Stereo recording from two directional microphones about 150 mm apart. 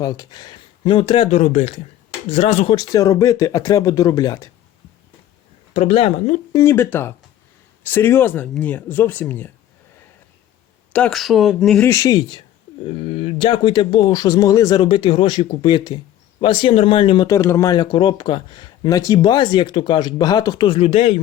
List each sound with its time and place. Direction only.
0.0 s speech: 25° left (ahead or behind); by 2.7 s 45° left (ahead or behind)
2.7 s speech: 20° left (ahead or behind)
5.7 s speech: 40° left (ahead or behind)
6.5 s speech: 20° left (ahead or behind)
10.9 s speech: 5° left (ahead or behind)
11.8 s speech: 20° left (ahead or behind)
12.9 s speech: 40° left (ahead or behind); by 14.8 s 25° left (ahead or behind)
14.8 s speech: 35° left (ahead or behind)